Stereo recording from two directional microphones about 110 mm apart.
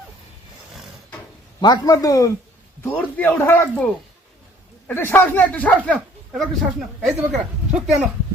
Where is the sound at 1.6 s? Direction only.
40° left (ahead or behind).